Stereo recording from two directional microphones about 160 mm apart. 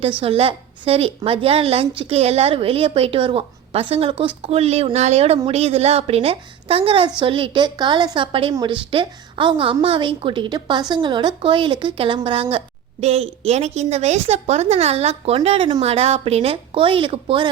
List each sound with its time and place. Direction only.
0.2 s a woman's voice: 35° right (ahead or behind)